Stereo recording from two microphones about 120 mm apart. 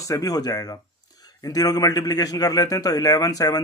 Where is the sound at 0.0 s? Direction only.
30° left (ahead or behind).